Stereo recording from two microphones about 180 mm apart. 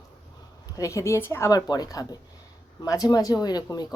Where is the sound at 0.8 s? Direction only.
15° left (ahead or behind).